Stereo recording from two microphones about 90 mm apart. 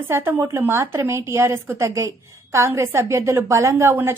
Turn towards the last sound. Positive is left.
turn(degrees=-35)  # may be behind; listen again after turning